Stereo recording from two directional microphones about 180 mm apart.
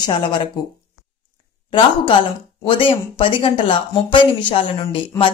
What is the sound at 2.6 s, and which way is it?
Speech, 30° left (ahead or behind).